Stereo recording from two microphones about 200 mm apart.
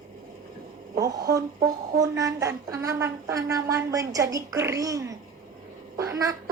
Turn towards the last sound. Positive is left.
turn(degrees=-15)  # may be behind; listen again after turning